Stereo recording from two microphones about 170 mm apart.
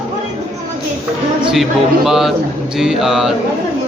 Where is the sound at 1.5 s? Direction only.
Centre (ahead or behind).